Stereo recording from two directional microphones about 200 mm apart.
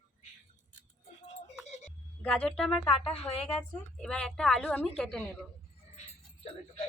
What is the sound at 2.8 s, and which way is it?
Speech, 25° left (ahead or behind).